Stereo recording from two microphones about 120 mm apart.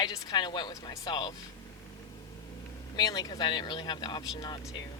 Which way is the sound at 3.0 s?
30° left (ahead or behind).